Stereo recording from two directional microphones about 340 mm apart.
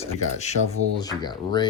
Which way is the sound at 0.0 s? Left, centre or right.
Centre.